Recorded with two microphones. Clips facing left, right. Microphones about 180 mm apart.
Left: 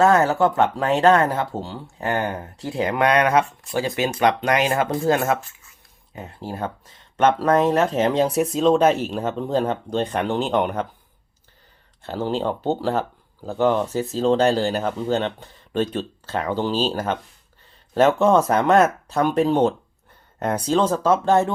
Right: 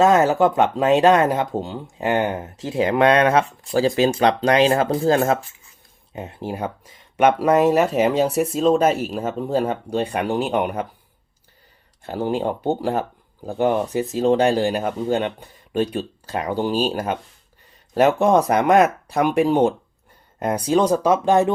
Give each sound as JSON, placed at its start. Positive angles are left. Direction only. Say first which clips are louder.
{"t": 0.0, "sound": "speech", "louder": "right 1 dB", "side_deg": -20}
{"t": 12.0, "sound": "speech", "louder": "right 1 dB", "side_deg": -15}